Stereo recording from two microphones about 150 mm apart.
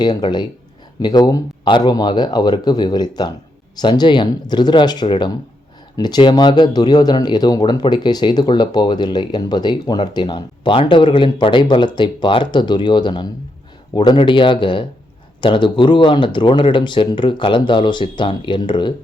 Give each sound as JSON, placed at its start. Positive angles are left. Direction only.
{"t": 0.0, "sound": "speech", "side_deg": 30}